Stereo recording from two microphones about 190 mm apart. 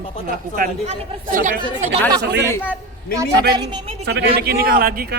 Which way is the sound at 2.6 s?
10° right (ahead or behind).